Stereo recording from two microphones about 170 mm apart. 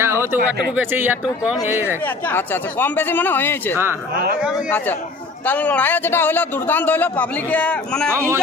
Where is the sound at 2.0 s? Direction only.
10° left (ahead or behind).